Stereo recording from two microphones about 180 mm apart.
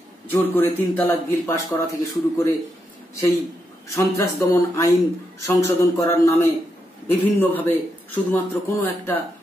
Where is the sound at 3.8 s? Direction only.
15° left (ahead or behind).